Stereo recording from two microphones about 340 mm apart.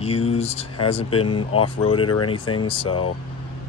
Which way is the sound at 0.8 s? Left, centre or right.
Centre.